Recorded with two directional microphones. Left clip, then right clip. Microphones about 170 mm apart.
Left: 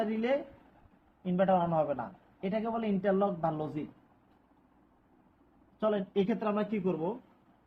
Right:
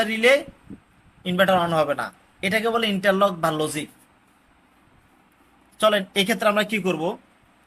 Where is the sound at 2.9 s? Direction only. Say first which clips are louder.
Right 7 dB; 10° right (ahead or behind).